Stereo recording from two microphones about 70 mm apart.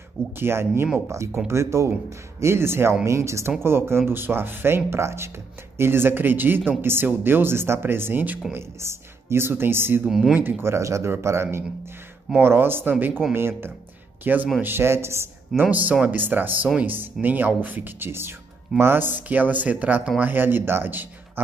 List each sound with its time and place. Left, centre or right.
0.4 s speech: right
10.0 s speech: centre
10.4 s speech: right
15.7 s speech: right